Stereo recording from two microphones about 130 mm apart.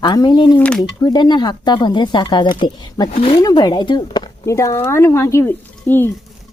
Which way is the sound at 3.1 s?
55° left (ahead or behind).